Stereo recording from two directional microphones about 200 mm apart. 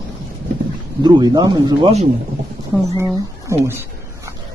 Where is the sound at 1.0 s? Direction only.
20° right (ahead or behind).